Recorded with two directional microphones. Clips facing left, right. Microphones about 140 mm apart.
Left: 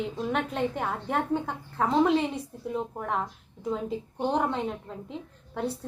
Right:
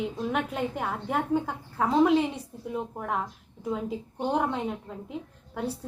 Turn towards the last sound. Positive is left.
turn(degrees=0)  # may be behind; listen again after turning